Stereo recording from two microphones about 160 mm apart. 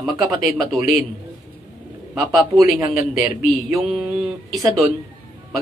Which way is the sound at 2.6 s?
20° right (ahead or behind).